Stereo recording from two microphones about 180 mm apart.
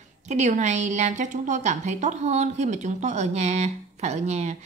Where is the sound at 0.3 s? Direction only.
40° right (ahead or behind).